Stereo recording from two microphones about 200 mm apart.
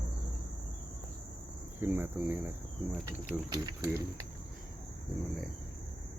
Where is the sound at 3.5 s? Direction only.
20° right (ahead or behind).